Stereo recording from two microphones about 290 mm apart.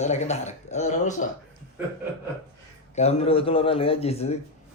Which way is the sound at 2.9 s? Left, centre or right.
Left.